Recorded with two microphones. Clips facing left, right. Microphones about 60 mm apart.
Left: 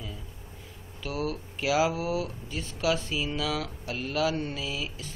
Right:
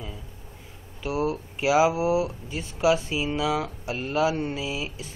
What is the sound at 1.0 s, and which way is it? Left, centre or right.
Speech, right.